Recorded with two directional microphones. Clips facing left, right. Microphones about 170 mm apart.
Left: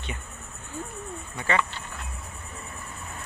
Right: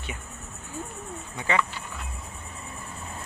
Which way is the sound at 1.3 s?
15° right (ahead or behind).